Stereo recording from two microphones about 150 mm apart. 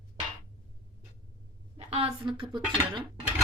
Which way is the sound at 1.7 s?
40° right (ahead or behind).